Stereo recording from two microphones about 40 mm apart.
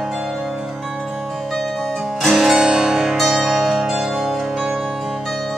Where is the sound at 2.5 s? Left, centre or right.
Centre.